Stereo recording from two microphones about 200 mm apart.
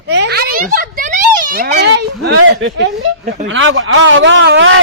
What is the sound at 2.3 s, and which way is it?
Speech, 65° right (ahead or behind).